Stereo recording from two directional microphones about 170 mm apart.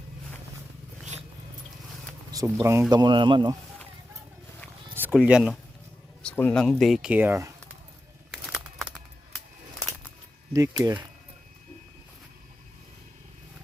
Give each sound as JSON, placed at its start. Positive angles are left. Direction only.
{"t": 2.3, "sound": "speech", "side_deg": -20}
{"t": 2.9, "sound": "speech", "side_deg": -25}
{"t": 4.9, "sound": "speech", "side_deg": -10}
{"t": 6.2, "sound": "speech", "side_deg": 10}
{"t": 8.3, "sound": "a sound", "side_deg": -5}
{"t": 10.5, "sound": "speech", "side_deg": -20}